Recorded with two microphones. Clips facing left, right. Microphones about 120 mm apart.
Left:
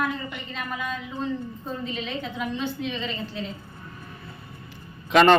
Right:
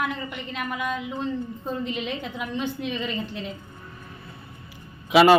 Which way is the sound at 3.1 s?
65° right (ahead or behind).